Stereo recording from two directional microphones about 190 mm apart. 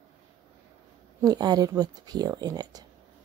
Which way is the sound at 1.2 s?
20° right (ahead or behind).